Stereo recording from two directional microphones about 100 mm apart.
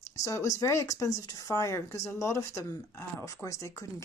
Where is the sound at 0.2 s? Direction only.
30° left (ahead or behind).